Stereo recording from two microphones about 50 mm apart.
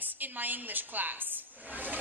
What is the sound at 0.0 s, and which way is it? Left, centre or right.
A woman's voice, right.